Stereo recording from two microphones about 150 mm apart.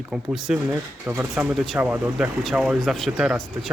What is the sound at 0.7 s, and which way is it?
Speech, 15° right (ahead or behind).